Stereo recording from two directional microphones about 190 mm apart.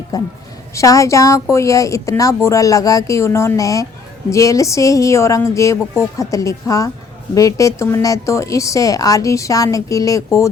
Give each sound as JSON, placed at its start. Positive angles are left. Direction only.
{"t": 0.1, "sound": "a woman's voice", "side_deg": 20}